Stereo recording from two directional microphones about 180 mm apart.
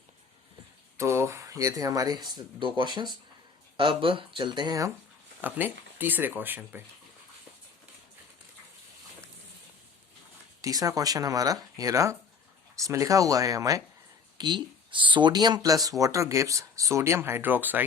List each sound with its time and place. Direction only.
0.9 s speech: 15° right (ahead or behind)
5.4 s speech: 10° right (ahead or behind)
10.6 s speech: 20° right (ahead or behind)